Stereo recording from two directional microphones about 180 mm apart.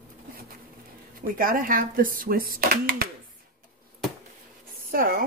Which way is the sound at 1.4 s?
50° right (ahead or behind).